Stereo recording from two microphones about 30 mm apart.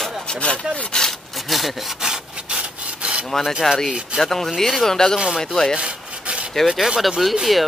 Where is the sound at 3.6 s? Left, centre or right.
Centre.